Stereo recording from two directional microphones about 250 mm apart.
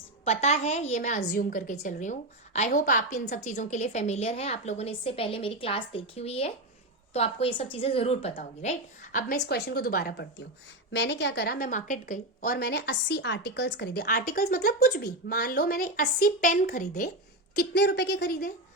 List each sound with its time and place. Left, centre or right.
0.3 s a woman's voice: left
9.1 s a woman's voice: left